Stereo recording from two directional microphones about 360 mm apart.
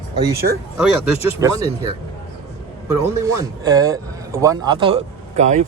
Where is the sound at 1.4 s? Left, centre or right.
Centre.